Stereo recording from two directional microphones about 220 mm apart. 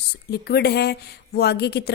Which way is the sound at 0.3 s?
50° left (ahead or behind).